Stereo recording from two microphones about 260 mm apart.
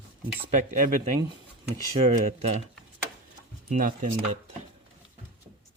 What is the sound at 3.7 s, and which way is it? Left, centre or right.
Speech, right.